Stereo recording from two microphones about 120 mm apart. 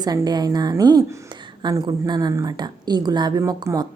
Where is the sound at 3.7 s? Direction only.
20° right (ahead or behind).